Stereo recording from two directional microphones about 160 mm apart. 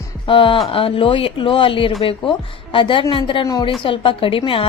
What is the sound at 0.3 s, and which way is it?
A woman's voice, 30° left (ahead or behind).